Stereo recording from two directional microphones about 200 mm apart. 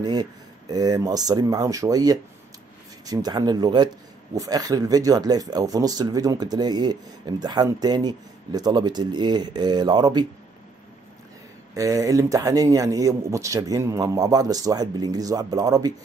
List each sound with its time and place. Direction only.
0.0 s speech: 20° right (ahead or behind)
11.7 s speech: 15° right (ahead or behind)